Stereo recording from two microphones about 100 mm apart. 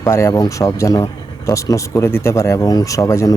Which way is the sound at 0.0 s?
30° left (ahead or behind).